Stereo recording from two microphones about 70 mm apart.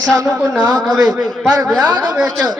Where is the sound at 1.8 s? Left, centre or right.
Right.